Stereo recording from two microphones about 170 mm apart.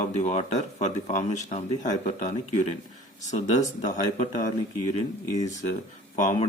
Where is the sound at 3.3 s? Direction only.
45° left (ahead or behind).